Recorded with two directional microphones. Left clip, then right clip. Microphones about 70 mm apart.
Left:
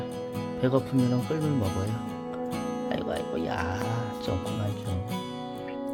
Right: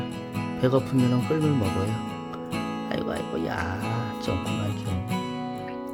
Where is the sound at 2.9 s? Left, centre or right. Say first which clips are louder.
Right 2 dB; right.